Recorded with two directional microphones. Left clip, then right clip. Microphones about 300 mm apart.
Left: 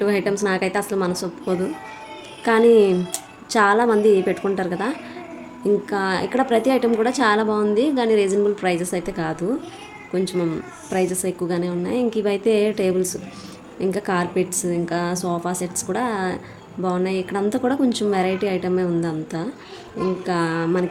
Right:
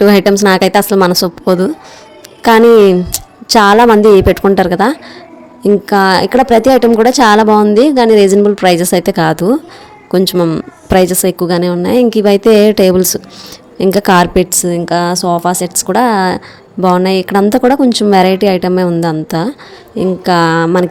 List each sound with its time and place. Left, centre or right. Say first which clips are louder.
0.0 s a woman's voice: right 13 dB; right